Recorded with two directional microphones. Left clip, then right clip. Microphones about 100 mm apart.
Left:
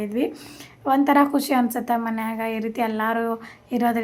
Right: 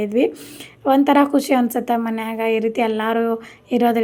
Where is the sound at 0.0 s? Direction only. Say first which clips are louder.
Right 7 dB; 35° right (ahead or behind).